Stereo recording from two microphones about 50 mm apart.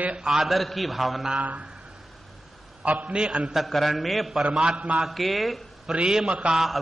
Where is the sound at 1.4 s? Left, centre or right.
Right.